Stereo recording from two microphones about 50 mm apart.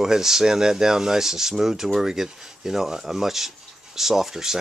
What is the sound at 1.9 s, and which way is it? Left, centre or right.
Speech, centre.